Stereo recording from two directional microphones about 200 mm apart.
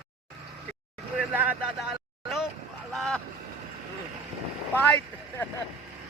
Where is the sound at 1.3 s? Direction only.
5° right (ahead or behind).